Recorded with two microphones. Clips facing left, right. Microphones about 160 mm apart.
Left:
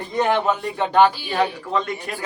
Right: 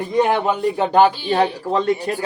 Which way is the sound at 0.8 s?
35° right (ahead or behind).